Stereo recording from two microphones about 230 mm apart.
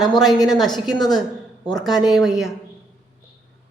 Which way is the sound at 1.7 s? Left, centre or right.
Centre.